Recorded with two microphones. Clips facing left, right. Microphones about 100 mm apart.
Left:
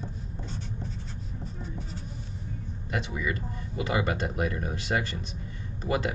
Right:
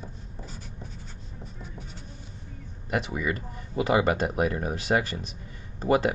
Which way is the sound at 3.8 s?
20° right (ahead or behind).